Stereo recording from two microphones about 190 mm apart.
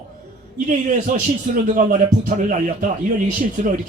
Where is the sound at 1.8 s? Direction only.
40° right (ahead or behind).